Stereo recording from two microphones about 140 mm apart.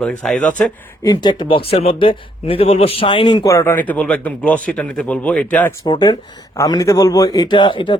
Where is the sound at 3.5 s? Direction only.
15° left (ahead or behind).